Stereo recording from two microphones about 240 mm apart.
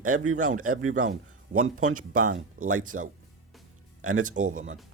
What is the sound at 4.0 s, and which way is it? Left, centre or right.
Speech, right.